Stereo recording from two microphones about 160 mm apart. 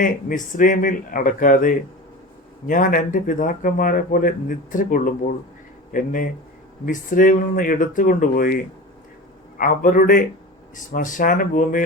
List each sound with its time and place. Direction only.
0.0 s speech: 55° left (ahead or behind)
9.6 s speech: 60° left (ahead or behind)